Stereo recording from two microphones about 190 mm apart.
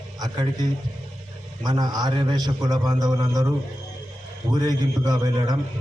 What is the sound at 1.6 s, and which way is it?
A man's voice, 20° right (ahead or behind).